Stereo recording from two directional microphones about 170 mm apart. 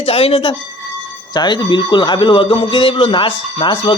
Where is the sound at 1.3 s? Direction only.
25° left (ahead or behind).